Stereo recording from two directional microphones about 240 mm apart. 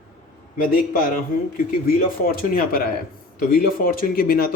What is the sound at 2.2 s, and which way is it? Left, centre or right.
Speech, left.